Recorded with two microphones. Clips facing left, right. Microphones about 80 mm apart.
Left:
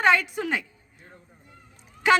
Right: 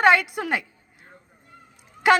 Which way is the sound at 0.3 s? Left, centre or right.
Right.